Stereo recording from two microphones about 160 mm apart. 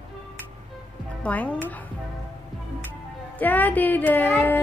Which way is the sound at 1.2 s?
10° left (ahead or behind).